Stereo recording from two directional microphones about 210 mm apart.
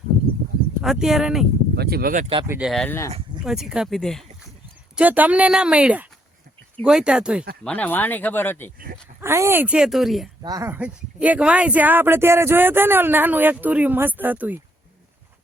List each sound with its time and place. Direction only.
0.8 s speech: centre (ahead or behind)
1.7 s speech: 50° right (ahead or behind)
2.5 s speech: 5° right (ahead or behind)
3.4 s speech: centre (ahead or behind)
7.6 s speech: 5° left (ahead or behind)
9.2 s speech: 10° right (ahead or behind)
10.4 s speech: 15° right (ahead or behind)